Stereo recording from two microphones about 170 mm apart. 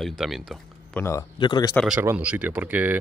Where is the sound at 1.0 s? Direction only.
15° left (ahead or behind).